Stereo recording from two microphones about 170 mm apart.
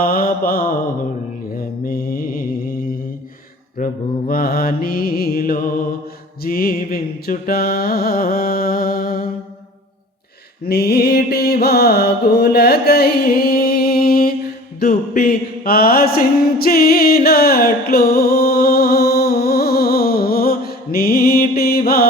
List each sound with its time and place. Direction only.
0.0 s mantra: 60° left (ahead or behind)
3.8 s mantra: 55° left (ahead or behind)
10.7 s mantra: 70° left (ahead or behind)